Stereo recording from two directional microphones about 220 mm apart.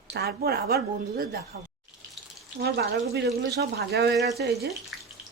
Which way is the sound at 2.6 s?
45° right (ahead or behind).